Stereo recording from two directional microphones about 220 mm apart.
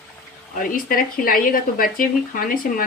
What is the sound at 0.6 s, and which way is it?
Speech, 40° left (ahead or behind).